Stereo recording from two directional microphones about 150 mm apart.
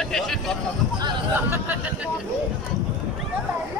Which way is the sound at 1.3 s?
10° right (ahead or behind).